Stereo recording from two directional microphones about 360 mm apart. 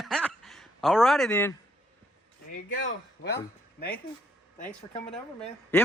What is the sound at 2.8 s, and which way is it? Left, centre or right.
Speech, left.